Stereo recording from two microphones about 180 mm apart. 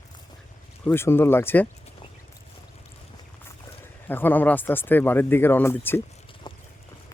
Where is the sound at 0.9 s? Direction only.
10° left (ahead or behind).